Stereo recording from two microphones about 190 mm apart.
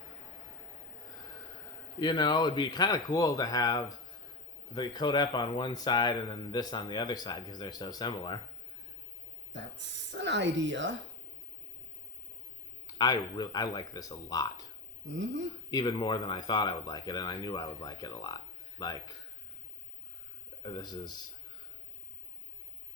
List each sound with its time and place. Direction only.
2.0 s speech: 20° left (ahead or behind)
9.5 s speech: 70° right (ahead or behind)
13.0 s speech: 20° left (ahead or behind)
15.0 s speech: 75° right (ahead or behind)
15.7 s speech: 20° left (ahead or behind)
20.6 s speech: 25° left (ahead or behind)